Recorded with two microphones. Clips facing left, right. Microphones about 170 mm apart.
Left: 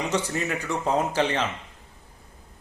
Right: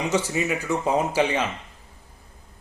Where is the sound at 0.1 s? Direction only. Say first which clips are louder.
Right 3 dB; 5° right (ahead or behind).